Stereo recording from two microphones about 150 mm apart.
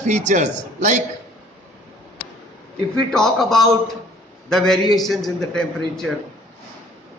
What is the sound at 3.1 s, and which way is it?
A man's voice, 5° left (ahead or behind).